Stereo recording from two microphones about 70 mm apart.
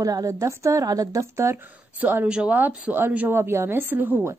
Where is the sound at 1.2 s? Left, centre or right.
Right.